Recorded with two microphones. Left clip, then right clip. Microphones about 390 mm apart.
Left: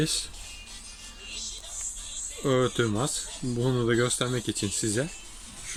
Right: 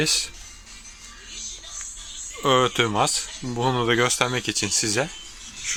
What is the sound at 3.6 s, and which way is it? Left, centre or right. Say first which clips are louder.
Speech: right 6 dB; right.